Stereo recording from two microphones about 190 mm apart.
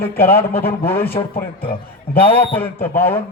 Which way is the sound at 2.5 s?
10° left (ahead or behind).